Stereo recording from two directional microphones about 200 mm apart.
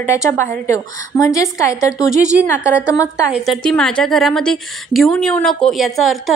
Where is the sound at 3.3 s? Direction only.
Centre (ahead or behind).